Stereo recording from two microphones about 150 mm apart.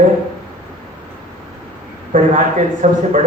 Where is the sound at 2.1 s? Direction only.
60° right (ahead or behind).